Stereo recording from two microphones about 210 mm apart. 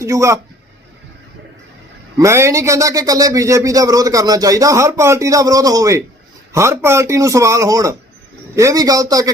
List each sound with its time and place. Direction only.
0.0 s a man's voice: 15° right (ahead or behind)
2.1 s a man's voice: 15° right (ahead or behind)